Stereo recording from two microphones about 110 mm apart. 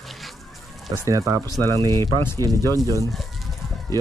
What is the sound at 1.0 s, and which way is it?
Speech, 30° right (ahead or behind).